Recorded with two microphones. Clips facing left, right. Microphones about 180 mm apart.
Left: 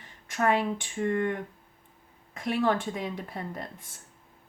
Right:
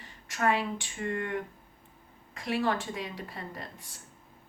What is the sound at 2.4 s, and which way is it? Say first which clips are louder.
Speech: left 3 dB; 55° left (ahead or behind).